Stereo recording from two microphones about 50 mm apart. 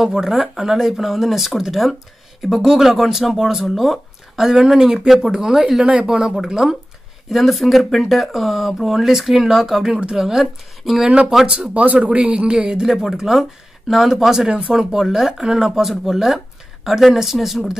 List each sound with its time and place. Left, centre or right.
0.0 s speech: centre
4.5 s speech: centre
12.8 s speech: centre